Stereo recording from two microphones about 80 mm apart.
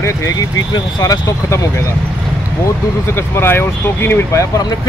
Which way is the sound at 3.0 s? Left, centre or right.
Left.